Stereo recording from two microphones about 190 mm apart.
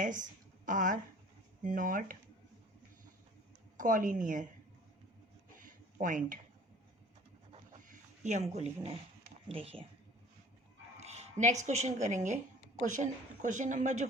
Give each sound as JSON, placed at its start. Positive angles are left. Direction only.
{"t": 0.0, "sound": "a woman's voice", "side_deg": -40}
{"t": 3.8, "sound": "a woman's voice", "side_deg": -45}
{"t": 5.5, "sound": "a sound", "side_deg": -45}
{"t": 7.9, "sound": "speech", "side_deg": -40}
{"t": 10.9, "sound": "speech", "side_deg": -35}